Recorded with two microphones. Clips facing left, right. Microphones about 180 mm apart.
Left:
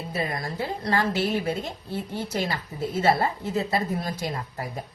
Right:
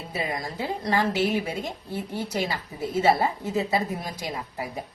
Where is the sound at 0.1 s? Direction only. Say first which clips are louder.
Even; 15° right (ahead or behind).